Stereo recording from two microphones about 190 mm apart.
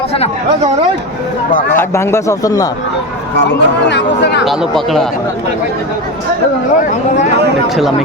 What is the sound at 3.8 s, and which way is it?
Speech, 65° left (ahead or behind).